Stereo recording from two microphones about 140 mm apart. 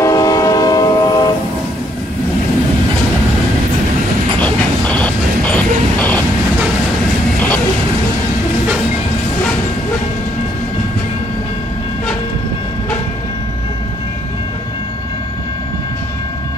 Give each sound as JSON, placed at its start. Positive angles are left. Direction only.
{"t": 0.0, "sound": "train", "side_deg": 25}
{"t": 4.4, "sound": "train", "side_deg": 10}